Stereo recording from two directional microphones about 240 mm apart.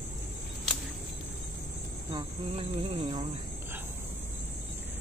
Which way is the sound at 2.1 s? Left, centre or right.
Right.